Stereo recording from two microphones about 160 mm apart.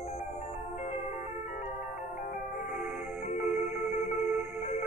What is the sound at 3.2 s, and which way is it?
Music, 45° left (ahead or behind).